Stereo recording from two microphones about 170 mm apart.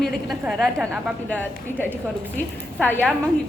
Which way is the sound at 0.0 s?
Centre (ahead or behind).